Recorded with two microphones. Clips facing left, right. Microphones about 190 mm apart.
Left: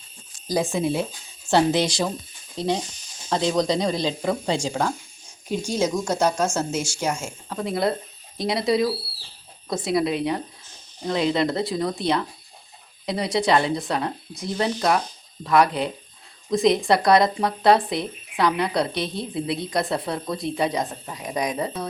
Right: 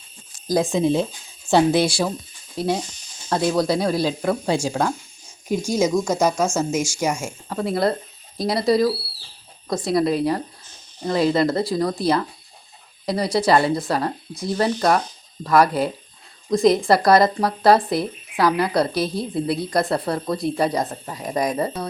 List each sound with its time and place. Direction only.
0.7 s speech: 20° right (ahead or behind); by 21.8 s centre (ahead or behind)